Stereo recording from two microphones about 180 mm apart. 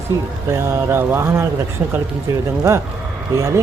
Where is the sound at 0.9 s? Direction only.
15° right (ahead or behind).